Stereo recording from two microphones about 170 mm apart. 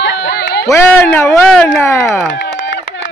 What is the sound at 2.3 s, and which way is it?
Chop, 90° left.